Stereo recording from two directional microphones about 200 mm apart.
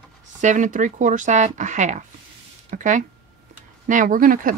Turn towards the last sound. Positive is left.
turn(degrees=-45)  # may be behind; listen again after turning